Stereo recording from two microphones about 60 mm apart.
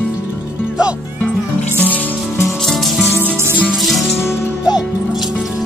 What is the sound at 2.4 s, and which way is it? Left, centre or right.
Music, centre.